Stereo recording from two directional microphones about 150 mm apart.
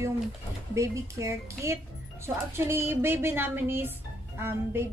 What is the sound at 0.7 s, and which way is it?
Speech, 20° right (ahead or behind).